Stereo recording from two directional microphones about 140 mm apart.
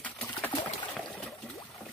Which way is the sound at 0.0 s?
10° left (ahead or behind).